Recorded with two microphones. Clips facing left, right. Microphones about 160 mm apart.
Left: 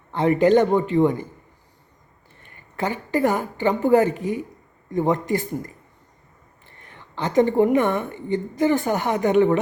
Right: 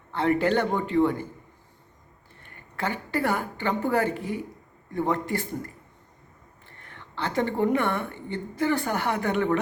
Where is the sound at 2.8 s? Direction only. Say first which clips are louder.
Left 6 dB; 15° left (ahead or behind).